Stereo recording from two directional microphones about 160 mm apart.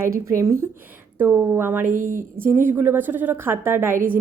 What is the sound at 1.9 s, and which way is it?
Speech, 60° right (ahead or behind).